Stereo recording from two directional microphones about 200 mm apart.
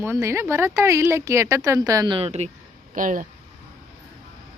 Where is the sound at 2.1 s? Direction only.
30° right (ahead or behind).